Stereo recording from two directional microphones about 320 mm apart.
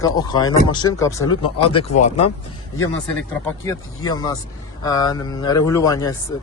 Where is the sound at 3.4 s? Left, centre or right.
Centre.